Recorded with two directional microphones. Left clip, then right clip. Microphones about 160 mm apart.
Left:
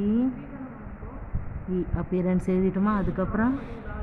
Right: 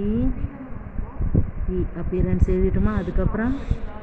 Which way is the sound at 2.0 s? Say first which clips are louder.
Right 1 dB; 45° left (ahead or behind).